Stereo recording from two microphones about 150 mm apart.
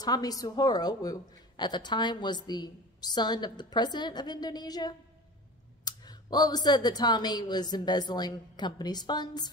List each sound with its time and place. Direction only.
0.0 s a woman's voice: 25° left (ahead or behind)